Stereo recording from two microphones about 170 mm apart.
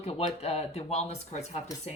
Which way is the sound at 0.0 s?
35° left (ahead or behind).